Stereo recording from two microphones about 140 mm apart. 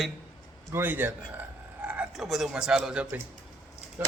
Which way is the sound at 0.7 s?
15° right (ahead or behind).